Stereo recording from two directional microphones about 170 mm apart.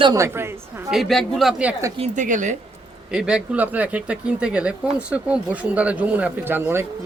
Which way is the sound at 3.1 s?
5° right (ahead or behind).